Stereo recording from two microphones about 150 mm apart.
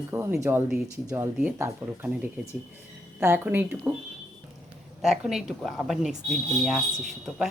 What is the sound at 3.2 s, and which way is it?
Speech, 15° right (ahead or behind).